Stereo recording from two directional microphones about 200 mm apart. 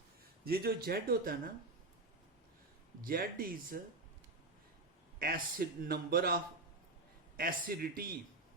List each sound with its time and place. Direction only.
0.4 s speech: 50° right (ahead or behind)
3.0 s speech: 45° right (ahead or behind)
5.2 s speech: 50° right (ahead or behind)